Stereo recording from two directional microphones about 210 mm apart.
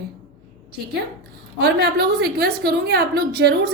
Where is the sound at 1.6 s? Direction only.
50° right (ahead or behind).